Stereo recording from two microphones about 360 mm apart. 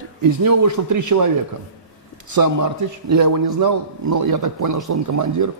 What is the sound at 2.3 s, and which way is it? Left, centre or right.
A man's voice, right.